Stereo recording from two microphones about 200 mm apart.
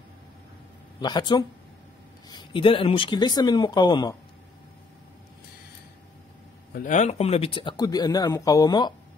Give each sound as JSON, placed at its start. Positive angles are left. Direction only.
{"t": 1.0, "sound": "speech", "side_deg": 20}
{"t": 6.7, "sound": "speech", "side_deg": 40}